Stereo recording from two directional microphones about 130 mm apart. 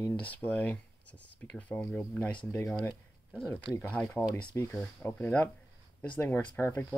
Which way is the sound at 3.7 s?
10° left (ahead or behind).